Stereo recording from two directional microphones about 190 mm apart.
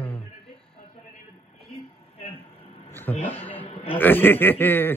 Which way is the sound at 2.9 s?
10° left (ahead or behind).